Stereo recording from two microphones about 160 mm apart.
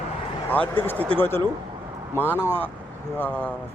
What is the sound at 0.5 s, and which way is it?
Speech, 10° left (ahead or behind).